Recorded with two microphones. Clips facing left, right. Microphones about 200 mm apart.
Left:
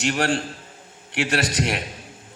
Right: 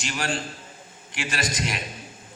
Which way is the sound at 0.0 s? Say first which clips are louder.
Left 7 dB; 70° left (ahead or behind).